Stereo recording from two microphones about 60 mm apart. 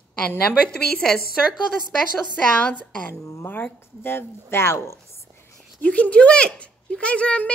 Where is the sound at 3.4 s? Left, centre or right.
Left.